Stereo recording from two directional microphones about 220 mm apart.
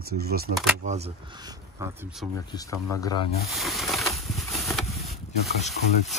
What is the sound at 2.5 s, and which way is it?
Speech, 20° left (ahead or behind).